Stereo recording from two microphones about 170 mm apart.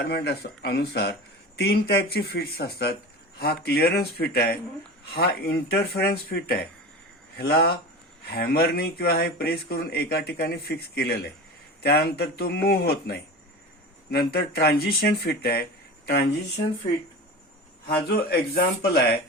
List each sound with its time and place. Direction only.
0.0 s speech: 70° left (ahead or behind)
17.8 s speech: 65° left (ahead or behind)